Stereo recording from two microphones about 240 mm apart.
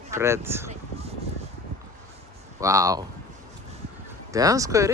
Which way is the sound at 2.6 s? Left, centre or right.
Centre.